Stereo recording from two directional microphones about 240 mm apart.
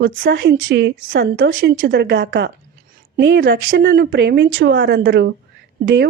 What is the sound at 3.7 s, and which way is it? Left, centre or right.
Speech, right.